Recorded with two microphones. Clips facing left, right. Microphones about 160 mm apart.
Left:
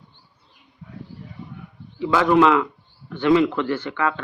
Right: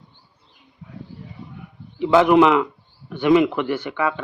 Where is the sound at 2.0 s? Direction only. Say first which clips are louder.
Right 3 dB; 20° right (ahead or behind).